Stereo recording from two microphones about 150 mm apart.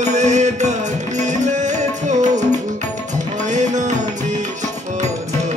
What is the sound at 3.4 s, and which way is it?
Music, 55° right (ahead or behind).